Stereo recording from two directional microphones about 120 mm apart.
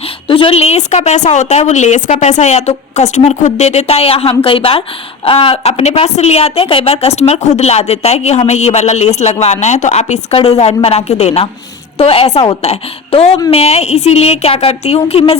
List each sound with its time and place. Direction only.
0.3 s a woman's voice: 50° left (ahead or behind); by 2.1 s 85° left
2.2 s a woman's voice: 75° left (ahead or behind)
10.3 s a woman's voice: 55° left (ahead or behind)